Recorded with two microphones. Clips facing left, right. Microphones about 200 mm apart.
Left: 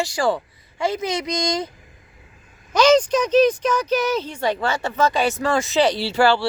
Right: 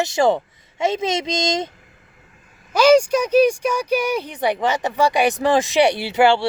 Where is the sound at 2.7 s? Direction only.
10° right (ahead or behind).